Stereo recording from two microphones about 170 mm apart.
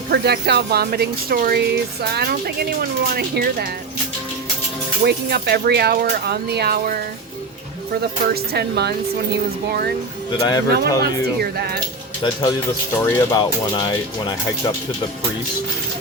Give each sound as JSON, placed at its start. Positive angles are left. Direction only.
{"t": 0.1, "sound": "speech", "side_deg": -75}
{"t": 3.2, "sound": "speech", "side_deg": -70}
{"t": 5.0, "sound": "speech", "side_deg": -70}
{"t": 8.3, "sound": "speech", "side_deg": -75}
{"t": 10.4, "sound": "speech", "side_deg": 25}
{"t": 12.2, "sound": "speech", "side_deg": 25}